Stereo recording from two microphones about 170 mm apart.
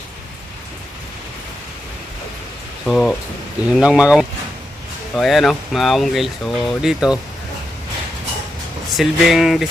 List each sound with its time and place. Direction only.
2.8 s speech: 5° left (ahead or behind)
9.0 s speech: centre (ahead or behind)